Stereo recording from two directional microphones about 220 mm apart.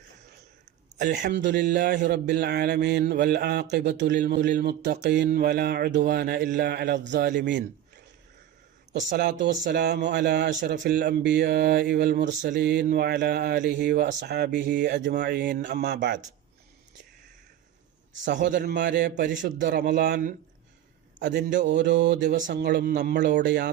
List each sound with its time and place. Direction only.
0.9 s speech: 35° right (ahead or behind)
1.5 s a man's voice: 50° right (ahead or behind)
9.0 s speech: 35° right (ahead or behind)
9.4 s a man's voice: 50° right (ahead or behind)
12.5 s a man's voice: 50° right (ahead or behind)
18.5 s a man's voice: 45° right (ahead or behind)